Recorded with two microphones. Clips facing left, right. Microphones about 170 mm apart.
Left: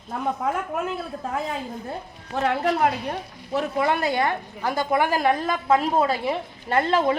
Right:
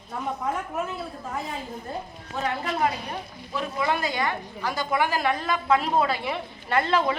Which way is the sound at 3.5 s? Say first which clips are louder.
Left 4 dB; 60° left (ahead or behind).